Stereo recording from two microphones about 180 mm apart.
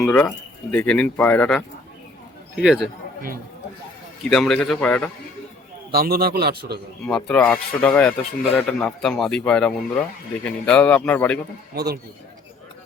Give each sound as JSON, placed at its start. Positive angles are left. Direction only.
{"t": 0.0, "sound": "a man's voice", "side_deg": 10}
{"t": 4.3, "sound": "a man's voice", "side_deg": 5}
{"t": 5.9, "sound": "a man's voice", "side_deg": -60}
{"t": 7.3, "sound": "speech", "side_deg": 5}
{"t": 11.7, "sound": "a man's voice", "side_deg": -65}